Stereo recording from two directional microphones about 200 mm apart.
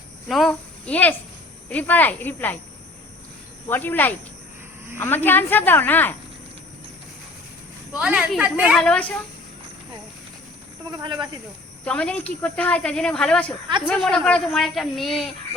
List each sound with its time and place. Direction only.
0.3 s a child's voice: centre (ahead or behind)
3.7 s speech: 10° left (ahead or behind)
7.9 s speech: 5° right (ahead or behind)
8.8 s speech: 5° left (ahead or behind)
10.9 s speech: 20° right (ahead or behind)
11.9 s speech: 5° left (ahead or behind)